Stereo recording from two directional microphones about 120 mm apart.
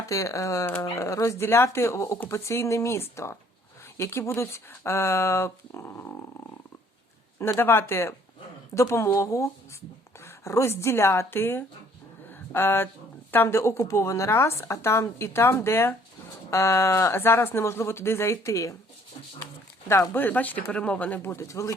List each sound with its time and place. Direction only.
0.0 s a woman's voice: 25° left (ahead or behind)
7.3 s a woman's voice: 20° left (ahead or behind)
12.3 s a sound: 20° left (ahead or behind)
13.3 s a woman's voice: 20° left (ahead or behind)
19.9 s speech: 20° left (ahead or behind)